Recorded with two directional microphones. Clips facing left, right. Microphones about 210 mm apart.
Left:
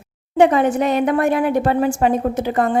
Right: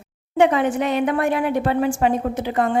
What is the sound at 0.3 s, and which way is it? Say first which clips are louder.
A woman's voice: left 3 dB; 40° left (ahead or behind).